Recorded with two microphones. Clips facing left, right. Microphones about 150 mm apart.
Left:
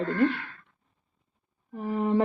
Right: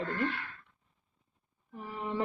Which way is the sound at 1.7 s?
45° left (ahead or behind).